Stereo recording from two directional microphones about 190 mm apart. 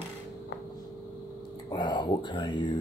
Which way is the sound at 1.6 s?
20° left (ahead or behind).